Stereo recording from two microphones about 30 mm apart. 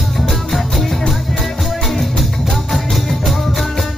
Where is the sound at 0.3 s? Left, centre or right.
Centre.